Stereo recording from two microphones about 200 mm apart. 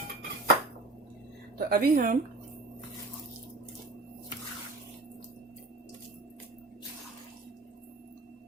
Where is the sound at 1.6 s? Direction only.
50° right (ahead or behind).